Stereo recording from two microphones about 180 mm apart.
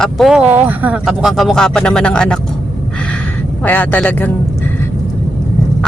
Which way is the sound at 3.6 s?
10° left (ahead or behind).